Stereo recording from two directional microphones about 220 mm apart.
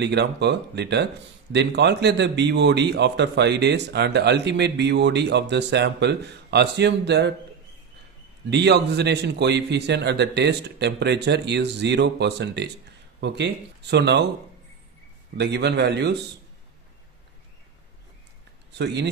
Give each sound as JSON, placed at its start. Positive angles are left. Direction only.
{"t": 0.0, "sound": "a man's voice", "side_deg": -50}
{"t": 8.5, "sound": "a man's voice", "side_deg": -50}
{"t": 15.3, "sound": "a man's voice", "side_deg": -50}
{"t": 18.8, "sound": "a man's voice", "side_deg": -50}